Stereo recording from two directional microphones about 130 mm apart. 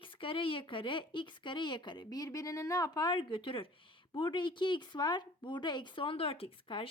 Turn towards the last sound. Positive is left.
turn(degrees=45)  # may be behind; listen again after turning